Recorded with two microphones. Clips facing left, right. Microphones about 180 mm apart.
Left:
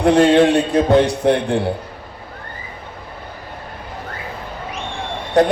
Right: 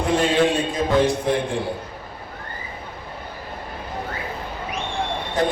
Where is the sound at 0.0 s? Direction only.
70° left (ahead or behind).